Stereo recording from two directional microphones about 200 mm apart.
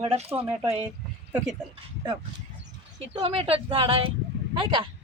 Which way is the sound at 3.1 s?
30° right (ahead or behind).